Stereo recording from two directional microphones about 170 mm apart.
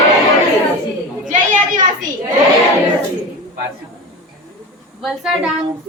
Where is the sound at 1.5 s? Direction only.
50° right (ahead or behind).